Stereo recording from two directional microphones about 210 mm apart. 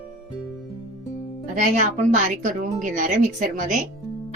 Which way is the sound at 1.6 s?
35° right (ahead or behind).